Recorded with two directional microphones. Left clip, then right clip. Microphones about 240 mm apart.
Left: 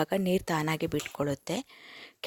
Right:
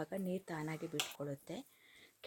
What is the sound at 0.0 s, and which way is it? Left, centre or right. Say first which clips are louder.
A woman's voice: left 14 dB; left.